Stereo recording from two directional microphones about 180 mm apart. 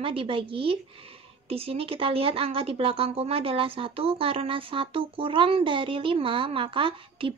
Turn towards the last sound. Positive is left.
turn(degrees=-30)  # may be behind; listen again after turning